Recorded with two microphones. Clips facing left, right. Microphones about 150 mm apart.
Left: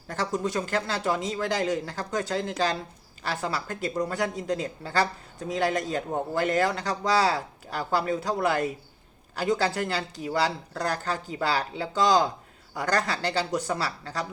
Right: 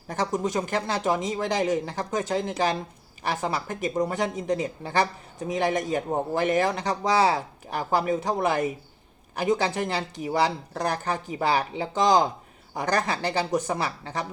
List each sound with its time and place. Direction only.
0.1 s speech: 20° right (ahead or behind)